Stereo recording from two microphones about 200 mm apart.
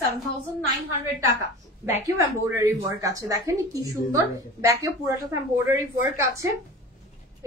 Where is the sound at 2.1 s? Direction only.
15° right (ahead or behind).